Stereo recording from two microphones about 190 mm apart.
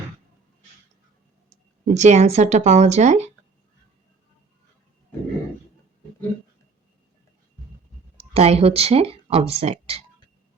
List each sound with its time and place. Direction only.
1.8 s speech: 35° right (ahead or behind)
8.3 s speech: 30° right (ahead or behind)